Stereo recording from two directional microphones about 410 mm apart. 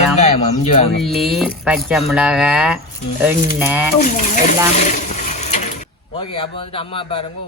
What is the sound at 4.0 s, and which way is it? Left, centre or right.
Speech, centre.